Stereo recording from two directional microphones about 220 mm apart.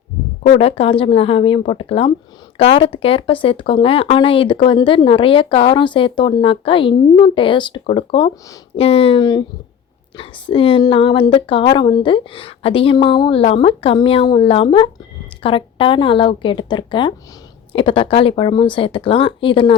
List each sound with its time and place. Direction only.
0.4 s speech: 25° left (ahead or behind)